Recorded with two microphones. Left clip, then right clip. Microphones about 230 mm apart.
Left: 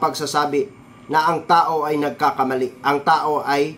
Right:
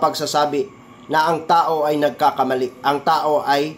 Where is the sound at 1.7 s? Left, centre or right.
Centre.